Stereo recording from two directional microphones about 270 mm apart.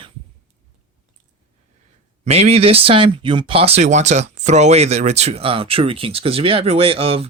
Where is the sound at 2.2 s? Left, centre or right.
Right.